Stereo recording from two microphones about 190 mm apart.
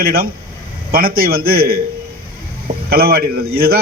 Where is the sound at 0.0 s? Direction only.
50° right (ahead or behind).